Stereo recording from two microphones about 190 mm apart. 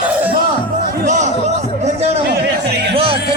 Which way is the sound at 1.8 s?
35° right (ahead or behind).